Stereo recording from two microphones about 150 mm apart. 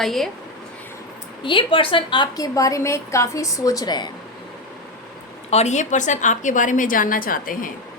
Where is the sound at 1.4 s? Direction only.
35° left (ahead or behind).